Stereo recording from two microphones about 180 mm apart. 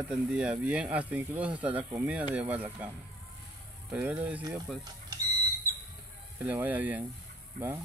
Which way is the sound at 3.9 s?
10° right (ahead or behind).